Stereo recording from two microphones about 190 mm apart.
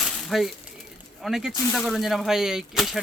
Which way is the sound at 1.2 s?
Centre (ahead or behind).